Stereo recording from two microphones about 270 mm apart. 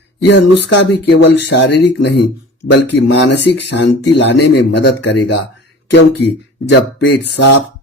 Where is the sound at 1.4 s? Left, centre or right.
Left.